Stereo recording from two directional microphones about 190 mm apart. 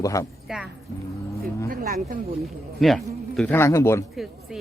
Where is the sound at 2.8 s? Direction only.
Centre (ahead or behind).